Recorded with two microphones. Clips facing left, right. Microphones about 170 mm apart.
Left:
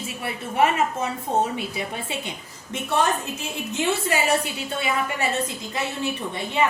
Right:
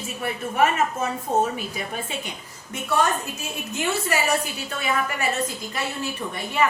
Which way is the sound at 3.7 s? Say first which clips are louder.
Left 1 dB; 25° left (ahead or behind).